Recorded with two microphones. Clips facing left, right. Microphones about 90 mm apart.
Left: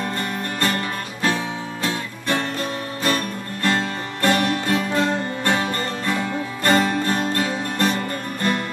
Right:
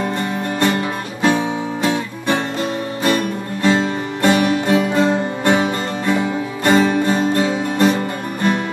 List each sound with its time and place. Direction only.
0.6 s music: 20° right (ahead or behind)